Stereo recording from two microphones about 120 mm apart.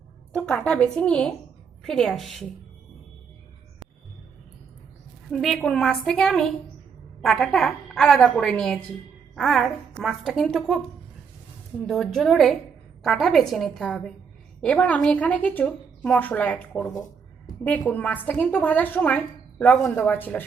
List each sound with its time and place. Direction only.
0.3 s a woman's voice: 10° left (ahead or behind)
5.3 s a woman's voice: centre (ahead or behind)
11.9 s a woman's voice: centre (ahead or behind)